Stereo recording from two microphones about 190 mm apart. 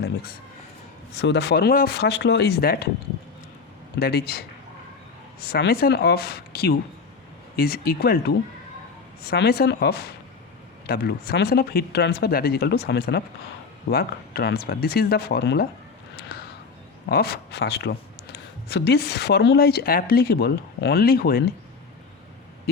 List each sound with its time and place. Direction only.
1.2 s speech: 65° left (ahead or behind)
4.0 s speech: 55° left (ahead or behind)
9.2 s speech: 60° left (ahead or behind)
17.1 s speech: 55° left (ahead or behind)